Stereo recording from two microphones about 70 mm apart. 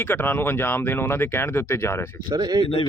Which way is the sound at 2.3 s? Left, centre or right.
Right.